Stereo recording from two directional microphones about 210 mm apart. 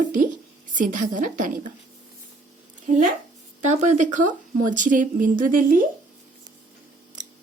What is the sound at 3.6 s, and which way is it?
A woman's voice, 35° right (ahead or behind).